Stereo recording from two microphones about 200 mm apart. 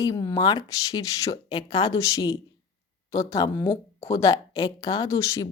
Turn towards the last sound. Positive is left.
turn(degrees=15)  # may be behind; listen again after turning